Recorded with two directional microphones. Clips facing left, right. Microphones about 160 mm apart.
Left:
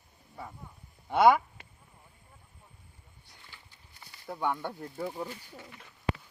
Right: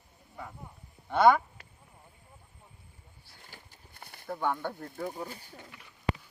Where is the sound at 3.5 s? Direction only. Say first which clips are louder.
Right 4 dB; 50° right (ahead or behind).